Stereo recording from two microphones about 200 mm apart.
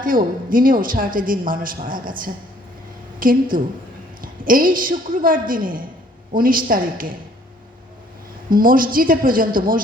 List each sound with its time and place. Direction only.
0.0 s speech: 45° right (ahead or behind)
8.4 s speech: 45° right (ahead or behind)